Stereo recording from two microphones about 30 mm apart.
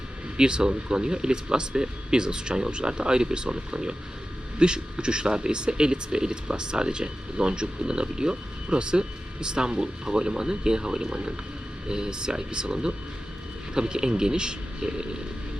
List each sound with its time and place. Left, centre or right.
0.3 s speech: right